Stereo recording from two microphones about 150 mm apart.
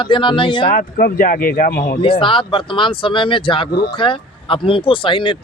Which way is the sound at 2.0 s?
35° left (ahead or behind).